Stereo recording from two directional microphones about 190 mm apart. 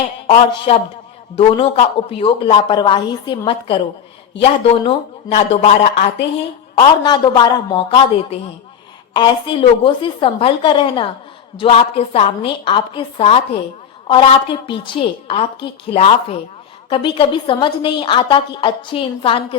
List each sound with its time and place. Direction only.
0.3 s a woman's voice: 30° left (ahead or behind)
6.7 s a woman's voice: 25° left (ahead or behind)